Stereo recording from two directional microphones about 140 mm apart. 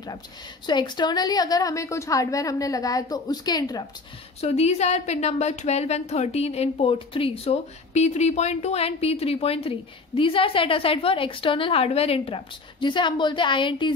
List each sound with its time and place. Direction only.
0.7 s a woman's voice: 30° left (ahead or behind)
4.4 s a woman's voice: 45° left (ahead or behind)